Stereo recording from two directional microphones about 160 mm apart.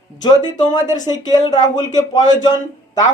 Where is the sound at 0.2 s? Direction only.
25° left (ahead or behind).